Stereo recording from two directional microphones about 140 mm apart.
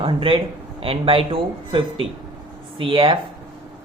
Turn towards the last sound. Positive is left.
turn(degrees=-35)  # may be behind; listen again after turning